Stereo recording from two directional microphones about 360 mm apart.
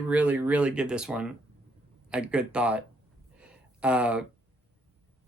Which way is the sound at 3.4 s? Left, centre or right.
Centre.